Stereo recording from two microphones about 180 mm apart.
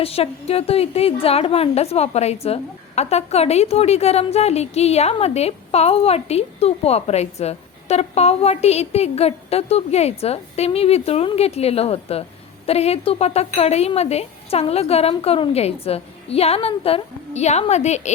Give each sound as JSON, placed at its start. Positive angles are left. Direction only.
{"t": 0.0, "sound": "a woman's voice", "side_deg": 35}